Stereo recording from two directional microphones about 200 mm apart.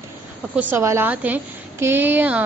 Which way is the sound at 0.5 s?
10° right (ahead or behind).